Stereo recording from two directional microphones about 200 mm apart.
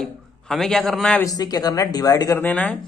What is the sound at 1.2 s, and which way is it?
Speech, 20° left (ahead or behind).